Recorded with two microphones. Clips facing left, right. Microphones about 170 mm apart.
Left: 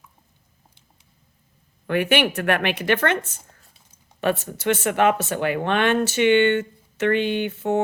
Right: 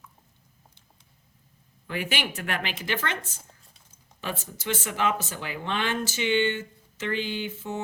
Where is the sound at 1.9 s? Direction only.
65° left (ahead or behind).